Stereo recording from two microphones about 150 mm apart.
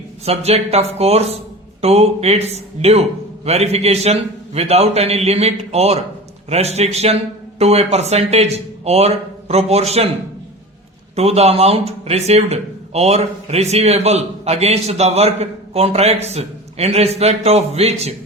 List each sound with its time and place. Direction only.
0.3 s speech: 45° right (ahead or behind)
11.1 s speech: 45° right (ahead or behind)